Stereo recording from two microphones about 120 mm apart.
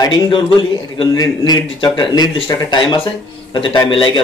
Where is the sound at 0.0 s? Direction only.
40° left (ahead or behind).